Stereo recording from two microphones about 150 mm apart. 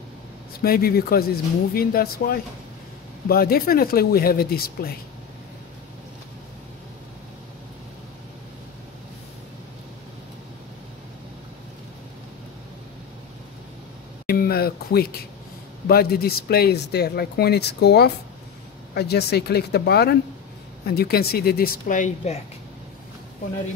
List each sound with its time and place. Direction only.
0.6 s speech: 85° left
14.2 s a sound: 85° left
15.9 s speech: 90° left; by 22.4 s 50° left (ahead or behind)